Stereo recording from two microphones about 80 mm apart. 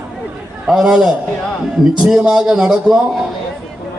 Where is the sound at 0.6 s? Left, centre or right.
Centre.